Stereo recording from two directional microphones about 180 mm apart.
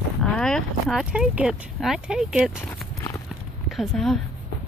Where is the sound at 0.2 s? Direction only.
5° left (ahead or behind).